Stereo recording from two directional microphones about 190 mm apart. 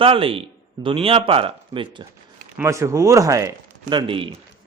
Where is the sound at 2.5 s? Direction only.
15° right (ahead or behind).